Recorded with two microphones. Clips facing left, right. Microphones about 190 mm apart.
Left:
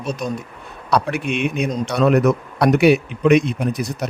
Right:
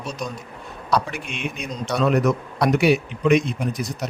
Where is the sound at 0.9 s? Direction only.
65° left (ahead or behind).